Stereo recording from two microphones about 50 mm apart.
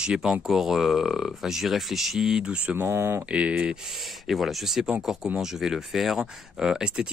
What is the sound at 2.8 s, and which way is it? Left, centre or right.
Speech, right.